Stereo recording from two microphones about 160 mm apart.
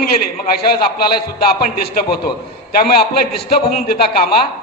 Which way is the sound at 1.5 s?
65° left (ahead or behind).